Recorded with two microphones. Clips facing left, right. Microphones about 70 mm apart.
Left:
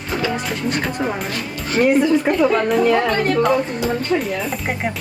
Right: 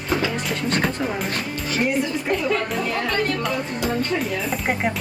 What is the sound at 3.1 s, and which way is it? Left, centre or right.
Speech, left.